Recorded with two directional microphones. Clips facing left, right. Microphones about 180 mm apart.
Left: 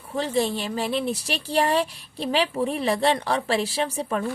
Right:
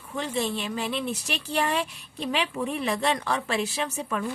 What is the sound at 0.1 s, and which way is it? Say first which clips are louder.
A woman's voice: left 5 dB; 35° left (ahead or behind).